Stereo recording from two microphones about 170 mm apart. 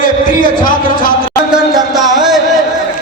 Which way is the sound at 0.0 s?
50° left (ahead or behind).